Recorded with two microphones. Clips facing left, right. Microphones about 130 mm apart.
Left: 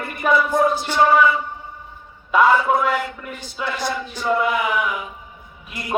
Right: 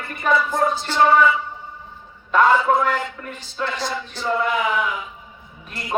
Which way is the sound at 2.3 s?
10° left (ahead or behind).